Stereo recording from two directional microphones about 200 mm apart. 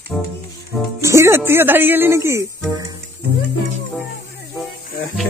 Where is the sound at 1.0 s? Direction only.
15° right (ahead or behind).